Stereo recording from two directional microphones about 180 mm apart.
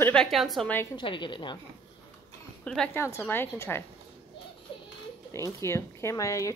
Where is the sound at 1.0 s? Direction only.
25° left (ahead or behind).